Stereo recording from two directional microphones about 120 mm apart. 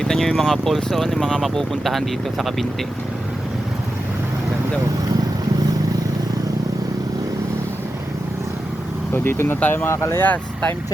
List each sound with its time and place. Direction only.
0.0 s speech: 5° left (ahead or behind)
9.1 s speech: 20° left (ahead or behind)